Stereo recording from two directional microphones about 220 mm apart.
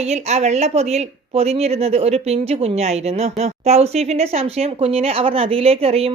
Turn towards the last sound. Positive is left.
turn(degrees=-25)  # may be behind; listen again after turning